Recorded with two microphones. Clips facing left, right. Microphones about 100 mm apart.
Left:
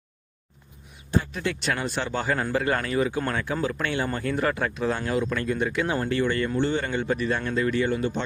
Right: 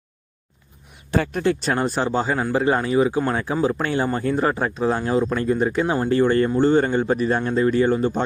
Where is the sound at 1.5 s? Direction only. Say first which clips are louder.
Right 7 dB; 35° right (ahead or behind).